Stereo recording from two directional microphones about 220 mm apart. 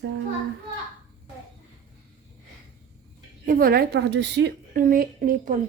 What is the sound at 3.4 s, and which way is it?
A woman's voice, 40° right (ahead or behind).